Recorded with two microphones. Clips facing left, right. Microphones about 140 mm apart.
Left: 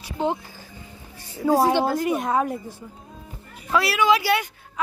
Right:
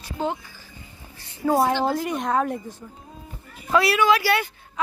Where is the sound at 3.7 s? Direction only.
Centre (ahead or behind).